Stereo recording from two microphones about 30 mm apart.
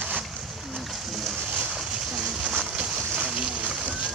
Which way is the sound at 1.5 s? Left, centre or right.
Right.